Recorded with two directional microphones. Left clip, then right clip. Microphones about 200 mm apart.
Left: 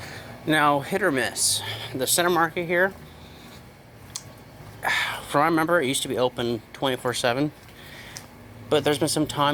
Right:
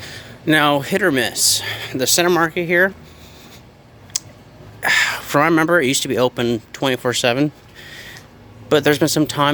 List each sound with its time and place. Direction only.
0.4 s speech: 45° right (ahead or behind)
4.8 s speech: 40° right (ahead or behind)